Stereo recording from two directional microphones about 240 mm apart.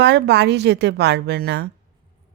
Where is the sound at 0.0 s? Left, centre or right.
Right.